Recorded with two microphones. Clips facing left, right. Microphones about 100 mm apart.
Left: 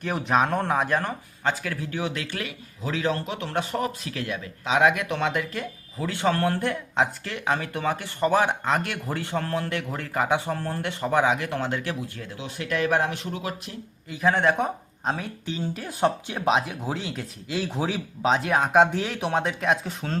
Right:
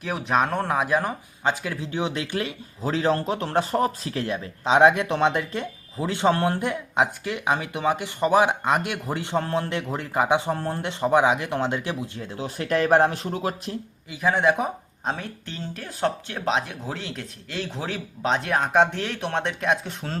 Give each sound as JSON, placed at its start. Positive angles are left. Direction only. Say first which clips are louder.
{"t": 0.0, "sound": "speech", "louder": "even", "side_deg": 0}
{"t": 1.5, "sound": "speech", "louder": "right 1 dB", "side_deg": -20}
{"t": 12.4, "sound": "speech", "louder": "right 3 dB", "side_deg": -40}
{"t": 14.1, "sound": "speech", "louder": "right 1 dB", "side_deg": 0}